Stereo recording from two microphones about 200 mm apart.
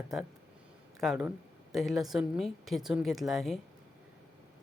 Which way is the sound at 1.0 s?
Centre (ahead or behind).